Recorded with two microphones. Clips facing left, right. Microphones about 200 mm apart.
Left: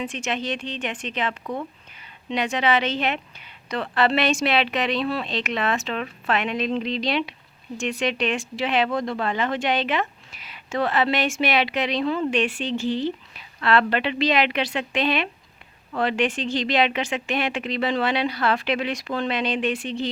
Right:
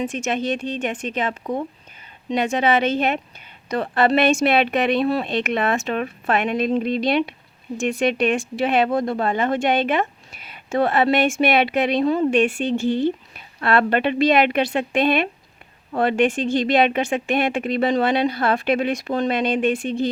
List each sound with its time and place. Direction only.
0.0 s a woman's voice: 45° right (ahead or behind)